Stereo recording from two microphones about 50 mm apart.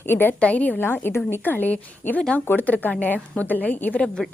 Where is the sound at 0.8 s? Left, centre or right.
Left.